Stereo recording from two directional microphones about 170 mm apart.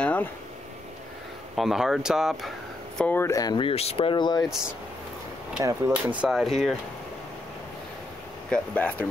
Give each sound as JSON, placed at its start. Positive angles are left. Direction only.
{"t": 0.0, "sound": "a sound", "side_deg": 10}
{"t": 1.5, "sound": "speech", "side_deg": 0}
{"t": 3.0, "sound": "speech", "side_deg": 10}
{"t": 5.6, "sound": "speech", "side_deg": -15}
{"t": 6.2, "sound": "speech", "side_deg": 0}
{"t": 8.5, "sound": "speech", "side_deg": 10}